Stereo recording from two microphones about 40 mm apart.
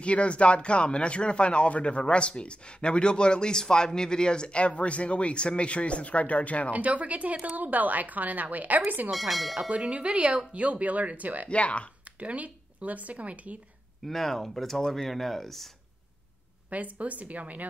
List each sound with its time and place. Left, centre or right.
0.0 s speech: left
6.7 s speech: right
9.1 s speech: centre
9.8 s speech: right
11.4 s speech: left
12.2 s speech: right
14.0 s speech: centre
16.7 s speech: right